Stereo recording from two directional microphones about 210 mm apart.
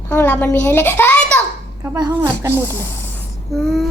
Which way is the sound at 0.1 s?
10° left (ahead or behind).